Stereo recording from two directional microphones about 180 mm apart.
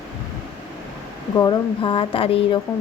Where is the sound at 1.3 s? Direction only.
15° left (ahead or behind).